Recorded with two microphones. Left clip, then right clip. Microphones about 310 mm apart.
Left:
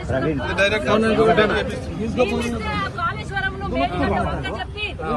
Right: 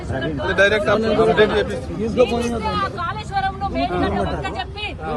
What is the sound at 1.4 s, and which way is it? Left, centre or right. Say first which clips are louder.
Speech: right 2 dB; right.